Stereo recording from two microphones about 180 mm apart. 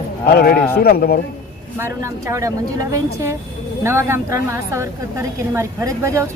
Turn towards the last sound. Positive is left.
turn(degrees=-15)  # may be behind; listen again after turning